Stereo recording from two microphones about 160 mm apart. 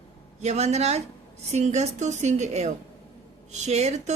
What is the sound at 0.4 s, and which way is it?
Speech, 45° right (ahead or behind).